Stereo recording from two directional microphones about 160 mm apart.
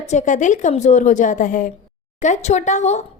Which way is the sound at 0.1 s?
50° left (ahead or behind).